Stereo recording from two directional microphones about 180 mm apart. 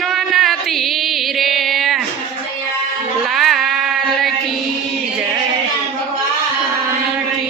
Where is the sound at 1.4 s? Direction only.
Centre (ahead or behind).